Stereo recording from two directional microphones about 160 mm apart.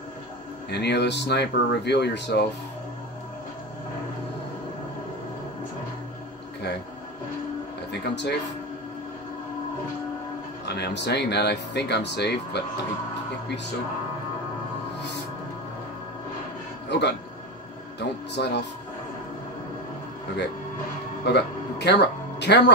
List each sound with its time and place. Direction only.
0.7 s speech: 90° left
7.9 s speech: 90° left
10.6 s speech: 90° left
16.9 s speech: 90° left
21.3 s music: 90° left